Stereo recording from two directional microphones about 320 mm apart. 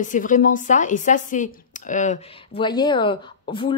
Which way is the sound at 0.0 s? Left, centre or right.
Left.